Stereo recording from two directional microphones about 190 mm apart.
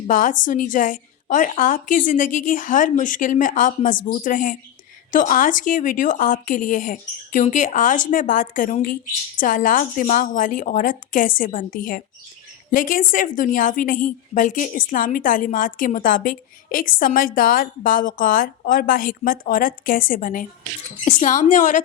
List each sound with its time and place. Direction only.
0.1 s a woman's voice: 45° left (ahead or behind)